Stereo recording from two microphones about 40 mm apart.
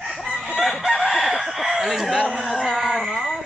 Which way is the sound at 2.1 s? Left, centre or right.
Right.